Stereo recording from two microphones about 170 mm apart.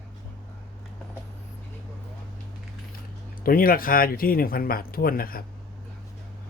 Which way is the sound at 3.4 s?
60° left (ahead or behind).